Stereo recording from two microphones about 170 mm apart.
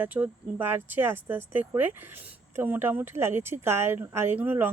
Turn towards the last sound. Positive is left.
turn(degrees=-10)  # may be behind; listen again after turning